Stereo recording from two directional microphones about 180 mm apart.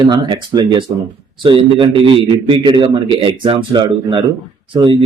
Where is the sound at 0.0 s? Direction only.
25° right (ahead or behind).